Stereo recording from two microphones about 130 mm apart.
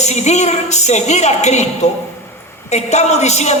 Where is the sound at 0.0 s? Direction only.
60° left (ahead or behind).